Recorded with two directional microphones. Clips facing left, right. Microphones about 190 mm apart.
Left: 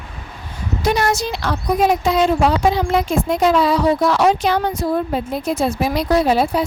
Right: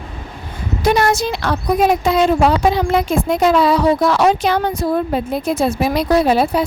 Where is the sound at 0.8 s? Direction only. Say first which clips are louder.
Right 3 dB; 55° right (ahead or behind).